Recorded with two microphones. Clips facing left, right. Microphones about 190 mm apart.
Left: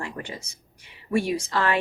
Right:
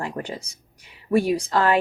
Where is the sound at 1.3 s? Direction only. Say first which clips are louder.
Right 4 dB; 35° right (ahead or behind).